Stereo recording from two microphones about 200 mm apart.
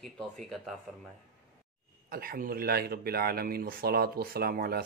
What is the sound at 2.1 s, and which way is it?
Speech, 45° right (ahead or behind).